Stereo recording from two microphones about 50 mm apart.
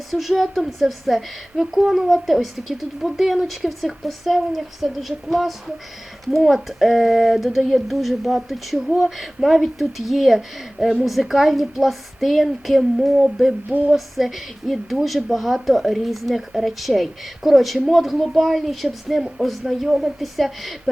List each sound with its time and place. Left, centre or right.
0.1 s speech: centre
1.5 s a sound: right
1.9 s speech: centre